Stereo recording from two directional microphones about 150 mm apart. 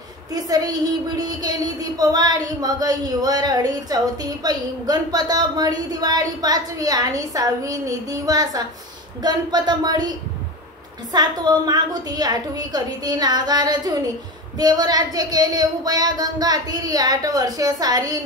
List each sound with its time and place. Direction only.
0.3 s a woman's voice: 25° right (ahead or behind)
11.1 s a woman's voice: 25° right (ahead or behind)